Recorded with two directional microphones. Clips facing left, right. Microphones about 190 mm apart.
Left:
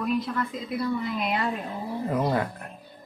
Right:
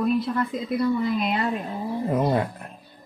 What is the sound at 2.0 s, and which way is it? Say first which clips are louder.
Speech: right 3 dB; 20° right (ahead or behind).